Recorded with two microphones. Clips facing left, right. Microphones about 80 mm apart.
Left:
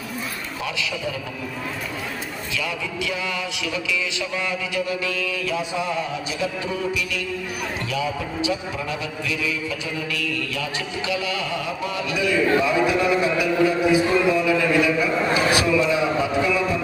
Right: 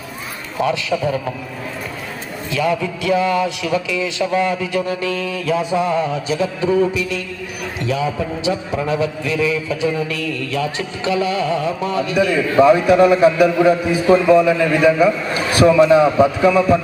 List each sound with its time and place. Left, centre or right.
0.6 s a man's voice: right
2.5 s speech: right
8.4 s a man's voice: right